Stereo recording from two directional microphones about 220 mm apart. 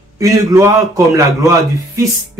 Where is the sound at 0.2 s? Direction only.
15° right (ahead or behind).